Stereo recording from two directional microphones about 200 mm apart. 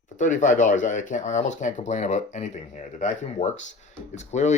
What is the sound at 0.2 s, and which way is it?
Speech, 40° left (ahead or behind).